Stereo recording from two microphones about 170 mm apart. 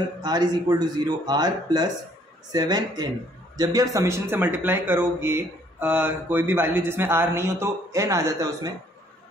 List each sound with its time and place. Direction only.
0.2 s a man's voice: 25° right (ahead or behind)